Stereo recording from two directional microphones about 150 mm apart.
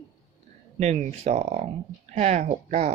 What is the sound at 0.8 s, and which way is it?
Speech, 50° right (ahead or behind).